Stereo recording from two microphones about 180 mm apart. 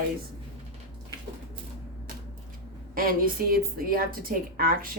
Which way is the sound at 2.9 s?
55° right (ahead or behind).